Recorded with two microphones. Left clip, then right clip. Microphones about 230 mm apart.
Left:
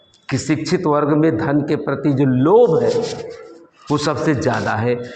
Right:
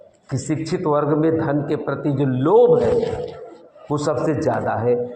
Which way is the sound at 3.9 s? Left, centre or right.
Left.